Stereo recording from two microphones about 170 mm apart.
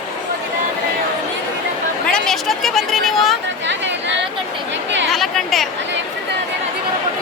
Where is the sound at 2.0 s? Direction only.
5° left (ahead or behind).